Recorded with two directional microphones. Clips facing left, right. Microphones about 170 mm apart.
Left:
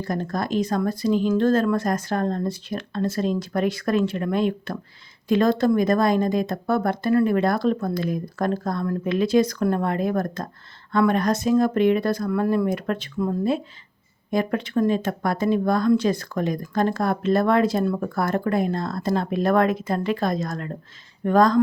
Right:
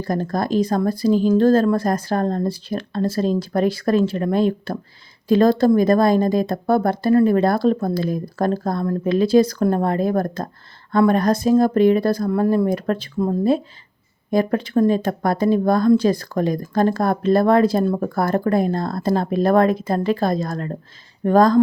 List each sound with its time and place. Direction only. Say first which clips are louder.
0.0 s speech: right 4 dB; 35° right (ahead or behind)